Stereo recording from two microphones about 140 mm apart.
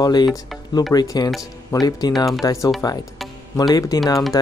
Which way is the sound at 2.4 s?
25° left (ahead or behind).